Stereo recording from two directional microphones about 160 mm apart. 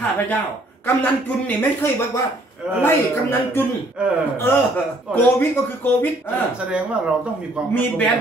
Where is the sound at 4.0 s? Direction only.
5° right (ahead or behind).